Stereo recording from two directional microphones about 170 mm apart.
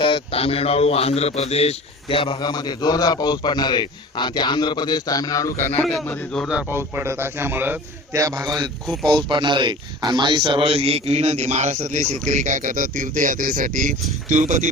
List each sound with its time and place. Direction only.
0.0 s a man's voice: 30° left (ahead or behind); by 14.7 s 45° right (ahead or behind)